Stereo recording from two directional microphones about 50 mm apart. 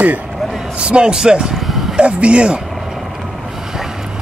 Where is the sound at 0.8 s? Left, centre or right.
Right.